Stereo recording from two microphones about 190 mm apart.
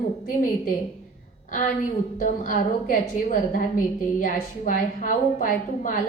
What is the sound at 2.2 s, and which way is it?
A woman's voice, 45° left (ahead or behind).